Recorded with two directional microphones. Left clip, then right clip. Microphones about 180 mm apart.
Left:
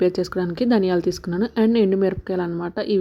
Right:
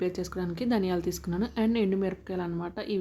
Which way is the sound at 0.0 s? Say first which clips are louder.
Left 11 dB; 35° left (ahead or behind).